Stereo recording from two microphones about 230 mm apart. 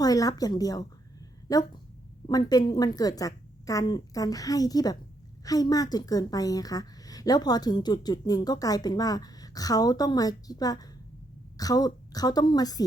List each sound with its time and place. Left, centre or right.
0.0 s a woman's voice: centre